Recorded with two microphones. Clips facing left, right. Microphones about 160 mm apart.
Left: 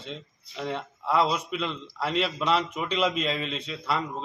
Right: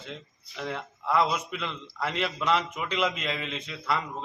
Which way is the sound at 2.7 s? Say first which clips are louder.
Left 2 dB; 30° left (ahead or behind).